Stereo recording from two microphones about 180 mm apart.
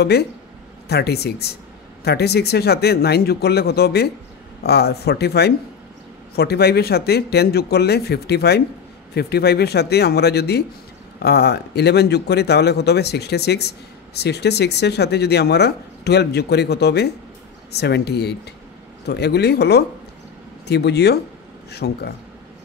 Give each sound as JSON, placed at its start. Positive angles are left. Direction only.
{"t": 0.0, "sound": "speech", "side_deg": 65}